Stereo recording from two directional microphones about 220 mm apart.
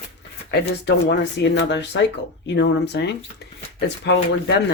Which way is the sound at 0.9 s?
50° left (ahead or behind).